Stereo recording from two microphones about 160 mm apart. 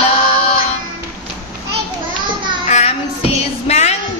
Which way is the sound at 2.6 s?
45° left (ahead or behind).